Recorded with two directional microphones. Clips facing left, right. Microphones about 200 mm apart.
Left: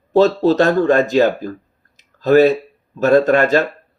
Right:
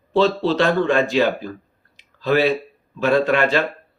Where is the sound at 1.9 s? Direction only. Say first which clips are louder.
Left 7 dB; 45° left (ahead or behind).